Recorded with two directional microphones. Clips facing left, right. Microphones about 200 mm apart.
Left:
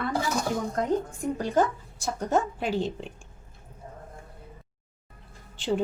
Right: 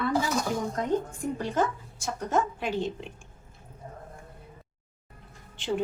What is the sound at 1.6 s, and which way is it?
Speech, 35° left (ahead or behind).